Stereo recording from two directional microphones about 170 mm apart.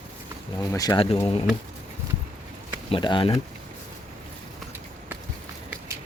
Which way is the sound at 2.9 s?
30° left (ahead or behind).